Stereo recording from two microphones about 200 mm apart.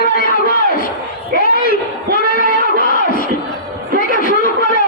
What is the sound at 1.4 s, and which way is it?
Speech, 45° left (ahead or behind).